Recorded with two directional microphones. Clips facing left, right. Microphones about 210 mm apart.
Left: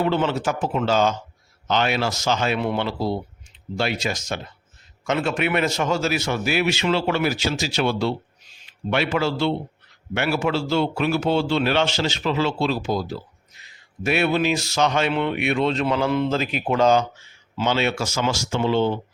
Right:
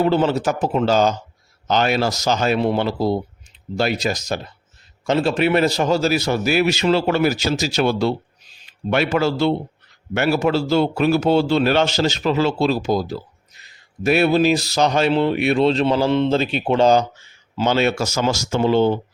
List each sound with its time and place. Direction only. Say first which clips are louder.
0.0 s a man's voice: right 4 dB; 35° right (ahead or behind)